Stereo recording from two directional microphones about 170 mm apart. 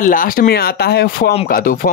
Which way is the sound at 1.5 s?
55° left (ahead or behind).